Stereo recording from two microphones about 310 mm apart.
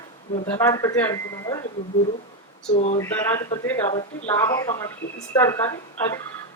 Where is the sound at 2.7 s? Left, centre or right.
Left.